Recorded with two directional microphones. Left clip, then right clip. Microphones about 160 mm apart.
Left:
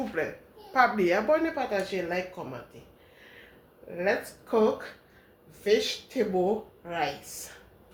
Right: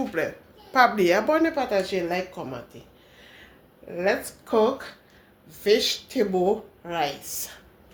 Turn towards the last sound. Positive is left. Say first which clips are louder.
# right 3 dB
turn(degrees=-85)